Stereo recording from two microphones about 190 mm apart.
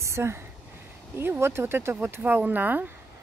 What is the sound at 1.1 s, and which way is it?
Speech, 10° right (ahead or behind).